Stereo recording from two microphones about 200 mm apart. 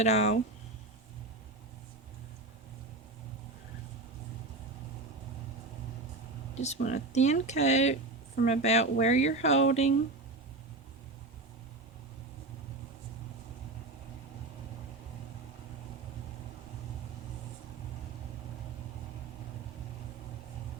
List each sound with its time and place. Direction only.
0.0 s speech: 35° left (ahead or behind)
6.5 s a sound: 35° left (ahead or behind)
6.8 s speech: 35° left (ahead or behind)